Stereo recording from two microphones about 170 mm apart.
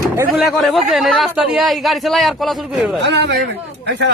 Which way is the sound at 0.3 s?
Centre (ahead or behind).